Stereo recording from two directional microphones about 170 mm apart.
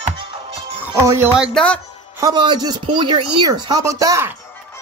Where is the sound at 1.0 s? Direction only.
15° right (ahead or behind).